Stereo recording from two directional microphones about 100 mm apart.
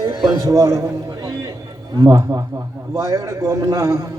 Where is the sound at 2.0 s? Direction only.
35° right (ahead or behind).